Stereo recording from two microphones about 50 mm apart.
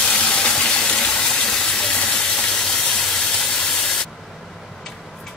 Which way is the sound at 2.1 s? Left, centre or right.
Centre.